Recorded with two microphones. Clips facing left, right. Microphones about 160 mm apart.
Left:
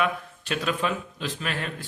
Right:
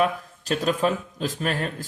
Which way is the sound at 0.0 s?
40° right (ahead or behind).